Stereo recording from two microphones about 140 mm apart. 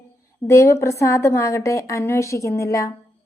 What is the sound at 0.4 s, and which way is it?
A woman's voice, 20° left (ahead or behind).